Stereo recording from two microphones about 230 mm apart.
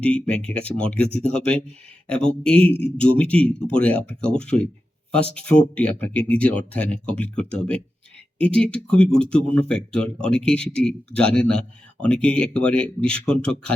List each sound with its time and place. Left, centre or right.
0.0 s speech: centre
2.6 s speech: right
3.2 s speech: centre